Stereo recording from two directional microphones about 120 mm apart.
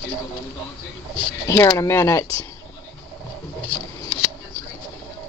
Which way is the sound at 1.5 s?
25° left (ahead or behind).